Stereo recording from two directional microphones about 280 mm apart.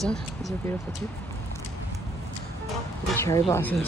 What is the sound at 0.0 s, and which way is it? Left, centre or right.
Speech, centre.